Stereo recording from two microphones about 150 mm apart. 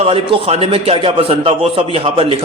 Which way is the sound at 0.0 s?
40° right (ahead or behind).